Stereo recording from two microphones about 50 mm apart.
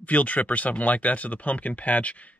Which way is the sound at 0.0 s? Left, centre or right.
Left.